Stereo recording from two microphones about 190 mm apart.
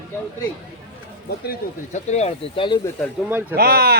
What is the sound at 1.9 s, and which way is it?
Speech, 35° left (ahead or behind).